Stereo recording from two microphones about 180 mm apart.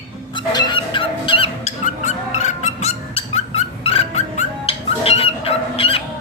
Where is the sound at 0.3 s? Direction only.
25° left (ahead or behind).